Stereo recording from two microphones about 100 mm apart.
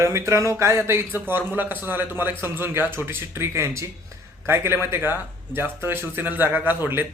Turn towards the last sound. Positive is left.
turn(degrees=-20)  # may be behind; listen again after turning